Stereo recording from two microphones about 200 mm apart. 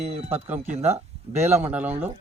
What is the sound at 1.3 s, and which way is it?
Speech, 10° right (ahead or behind).